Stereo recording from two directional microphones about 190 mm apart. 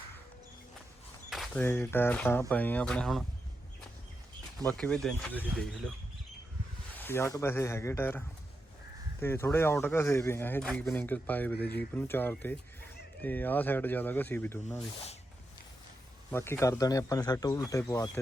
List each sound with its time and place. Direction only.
1.3 s a sound: centre (ahead or behind)
1.6 s speech: 10° left (ahead or behind)
4.6 s speech: 5° left (ahead or behind)
7.0 s speech: 15° left (ahead or behind)
9.2 s speech: 10° left (ahead or behind)
16.3 s speech: 15° left (ahead or behind)